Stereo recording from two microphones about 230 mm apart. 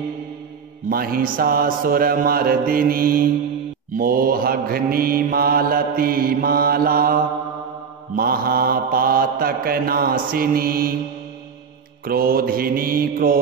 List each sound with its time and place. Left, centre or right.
0.8 s mantra: right
12.0 s mantra: right